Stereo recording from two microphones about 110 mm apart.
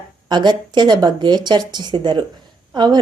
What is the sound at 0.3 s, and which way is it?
A woman's voice, 40° right (ahead or behind).